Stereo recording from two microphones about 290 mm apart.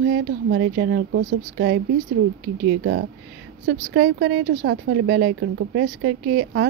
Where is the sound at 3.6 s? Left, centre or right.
Right.